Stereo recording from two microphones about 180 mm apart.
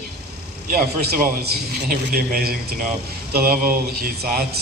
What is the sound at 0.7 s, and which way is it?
A man's voice, 55° right (ahead or behind).